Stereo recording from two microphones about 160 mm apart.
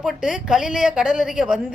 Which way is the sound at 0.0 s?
5° right (ahead or behind).